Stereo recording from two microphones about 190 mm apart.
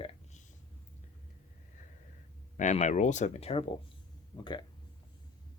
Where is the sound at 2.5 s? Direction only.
40° left (ahead or behind).